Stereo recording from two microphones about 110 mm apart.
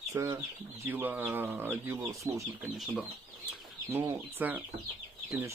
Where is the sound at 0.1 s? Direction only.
25° right (ahead or behind).